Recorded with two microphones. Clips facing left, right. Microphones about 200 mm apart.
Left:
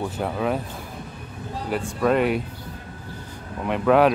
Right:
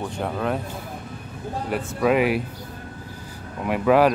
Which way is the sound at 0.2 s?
Centre (ahead or behind).